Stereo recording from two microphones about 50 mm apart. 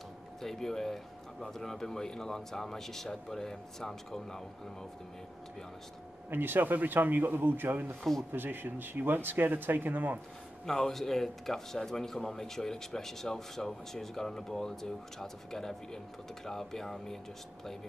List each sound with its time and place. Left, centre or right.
0.4 s speech: centre
6.3 s speech: right
10.6 s speech: centre